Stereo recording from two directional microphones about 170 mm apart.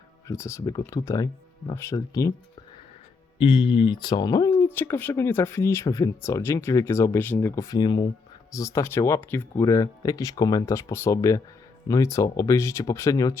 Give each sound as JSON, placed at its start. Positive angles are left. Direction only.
{"t": 0.3, "sound": "speech", "side_deg": 15}
{"t": 3.3, "sound": "speech", "side_deg": 30}